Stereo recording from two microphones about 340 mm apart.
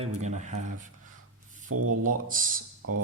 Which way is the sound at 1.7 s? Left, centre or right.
Right.